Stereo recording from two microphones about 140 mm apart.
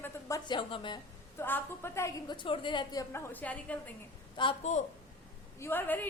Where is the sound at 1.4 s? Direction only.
15° left (ahead or behind).